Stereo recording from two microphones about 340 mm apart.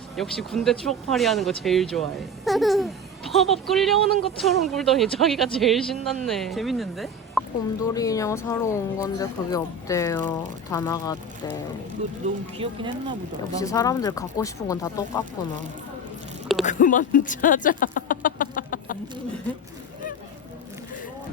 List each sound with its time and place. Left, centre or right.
0.2 s speech: centre
7.8 s speech: centre
12.5 s speech: centre
13.6 s speech: centre
16.6 s speech: left